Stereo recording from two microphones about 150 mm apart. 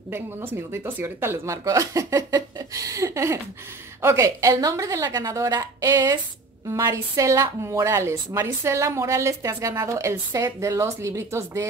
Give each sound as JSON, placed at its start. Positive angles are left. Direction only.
{"t": 0.1, "sound": "a woman's voice", "side_deg": -15}